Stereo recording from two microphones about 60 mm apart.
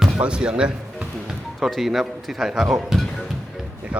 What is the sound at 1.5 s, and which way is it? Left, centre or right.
Speech, centre.